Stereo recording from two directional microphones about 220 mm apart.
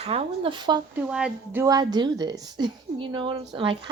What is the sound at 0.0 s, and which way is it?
Speech, 25° right (ahead or behind).